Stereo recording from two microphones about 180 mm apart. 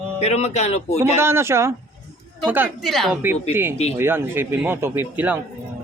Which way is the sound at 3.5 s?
10° right (ahead or behind).